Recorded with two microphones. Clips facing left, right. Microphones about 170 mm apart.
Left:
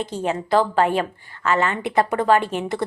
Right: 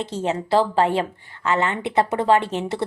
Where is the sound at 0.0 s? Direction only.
25° right (ahead or behind).